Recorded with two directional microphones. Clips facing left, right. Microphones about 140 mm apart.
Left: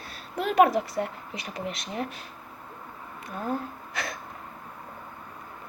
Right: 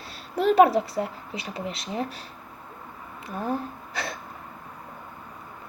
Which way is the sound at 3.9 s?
30° right (ahead or behind).